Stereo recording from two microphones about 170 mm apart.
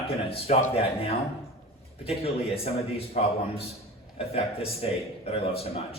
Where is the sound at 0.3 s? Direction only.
35° left (ahead or behind).